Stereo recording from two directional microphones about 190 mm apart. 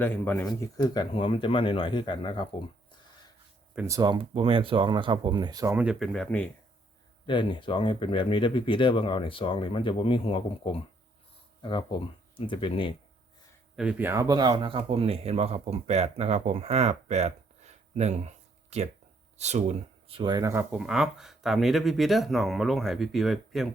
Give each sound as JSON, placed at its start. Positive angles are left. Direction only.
{"t": 0.0, "sound": "speech", "side_deg": 10}
{"t": 3.8, "sound": "speech", "side_deg": -15}
{"t": 5.7, "sound": "speech", "side_deg": -5}
{"t": 7.3, "sound": "speech", "side_deg": 25}
{"t": 13.7, "sound": "speech", "side_deg": -10}